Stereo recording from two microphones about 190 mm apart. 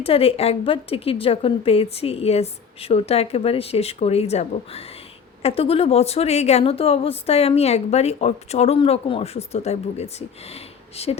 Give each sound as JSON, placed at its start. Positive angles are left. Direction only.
{"t": 0.0, "sound": "a woman's voice", "side_deg": 30}